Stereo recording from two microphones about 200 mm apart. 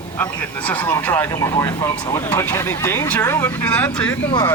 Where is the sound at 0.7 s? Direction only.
10° left (ahead or behind).